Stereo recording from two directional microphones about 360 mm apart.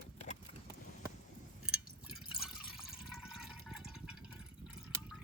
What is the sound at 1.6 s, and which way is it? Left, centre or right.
Drip, centre.